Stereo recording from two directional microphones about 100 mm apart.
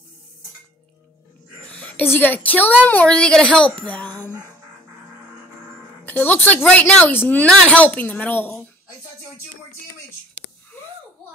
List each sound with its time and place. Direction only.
1.7 s a woman's voice: 15° left (ahead or behind)
6.0 s a woman's voice: 20° left (ahead or behind)